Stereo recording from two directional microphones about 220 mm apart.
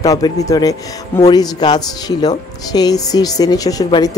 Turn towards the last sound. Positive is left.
turn(degrees=15)  # may be behind; listen again after turning